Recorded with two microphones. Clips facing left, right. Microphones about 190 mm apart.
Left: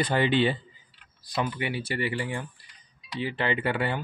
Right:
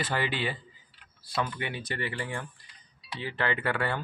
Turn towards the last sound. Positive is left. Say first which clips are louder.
# left 2 dB
turn(degrees=20)  # may be behind; listen again after turning